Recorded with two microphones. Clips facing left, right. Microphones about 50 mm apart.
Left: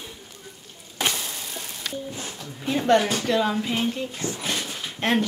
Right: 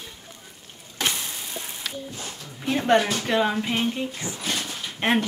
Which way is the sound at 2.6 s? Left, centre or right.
Centre.